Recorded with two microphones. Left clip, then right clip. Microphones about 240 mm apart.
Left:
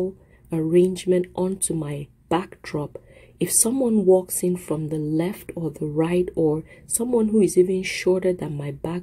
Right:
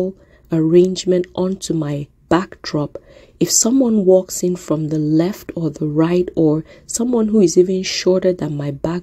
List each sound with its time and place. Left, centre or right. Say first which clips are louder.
0.5 s a woman's voice: right 6 dB; right